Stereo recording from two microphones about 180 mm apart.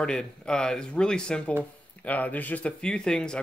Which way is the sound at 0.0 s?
5° left (ahead or behind).